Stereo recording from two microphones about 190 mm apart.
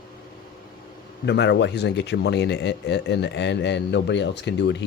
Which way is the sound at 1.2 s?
65° left (ahead or behind).